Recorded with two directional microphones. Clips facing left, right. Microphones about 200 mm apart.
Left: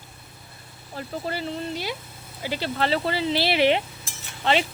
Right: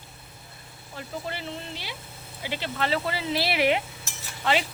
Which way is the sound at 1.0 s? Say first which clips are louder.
Left 5 dB; 40° left (ahead or behind).